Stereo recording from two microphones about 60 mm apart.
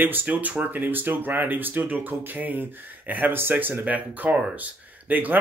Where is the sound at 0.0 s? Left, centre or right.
Right.